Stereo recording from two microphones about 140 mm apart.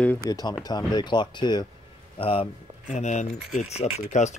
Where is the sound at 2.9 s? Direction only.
55° left (ahead or behind).